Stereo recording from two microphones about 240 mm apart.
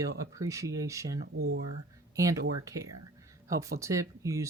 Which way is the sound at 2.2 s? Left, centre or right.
Centre.